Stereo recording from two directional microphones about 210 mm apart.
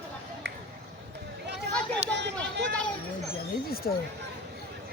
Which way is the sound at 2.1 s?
55° right (ahead or behind).